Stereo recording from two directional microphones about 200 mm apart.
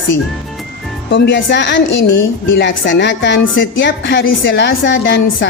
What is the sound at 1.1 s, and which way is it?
A woman's voice, 65° left (ahead or behind).